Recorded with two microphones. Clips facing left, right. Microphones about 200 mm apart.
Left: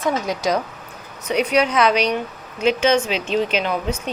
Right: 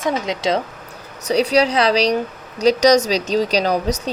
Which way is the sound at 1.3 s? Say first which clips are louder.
Right 2 dB; 35° right (ahead or behind).